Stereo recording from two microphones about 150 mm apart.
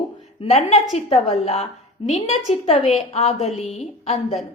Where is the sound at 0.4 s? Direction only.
45° left (ahead or behind).